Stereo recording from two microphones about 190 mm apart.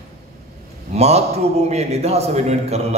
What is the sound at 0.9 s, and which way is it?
A man's voice, 35° right (ahead or behind).